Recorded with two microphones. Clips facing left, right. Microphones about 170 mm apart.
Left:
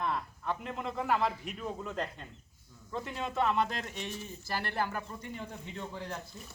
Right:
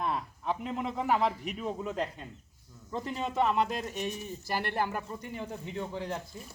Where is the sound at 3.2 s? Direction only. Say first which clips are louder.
Right 2 dB; 10° right (ahead or behind).